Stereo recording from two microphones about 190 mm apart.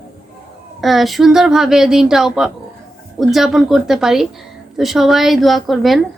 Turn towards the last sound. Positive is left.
turn(degrees=0)  # may be behind; listen again after turning